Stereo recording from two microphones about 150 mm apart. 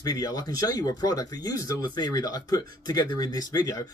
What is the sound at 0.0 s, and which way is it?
Speech, 25° left (ahead or behind).